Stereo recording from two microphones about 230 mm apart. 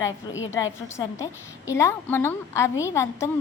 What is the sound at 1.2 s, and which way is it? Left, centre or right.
A woman's voice, centre.